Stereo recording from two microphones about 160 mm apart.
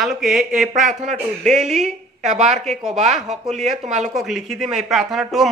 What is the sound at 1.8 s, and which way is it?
A woman's voice, 45° right (ahead or behind).